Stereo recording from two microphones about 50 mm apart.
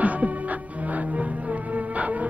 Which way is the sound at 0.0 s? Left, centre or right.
Right.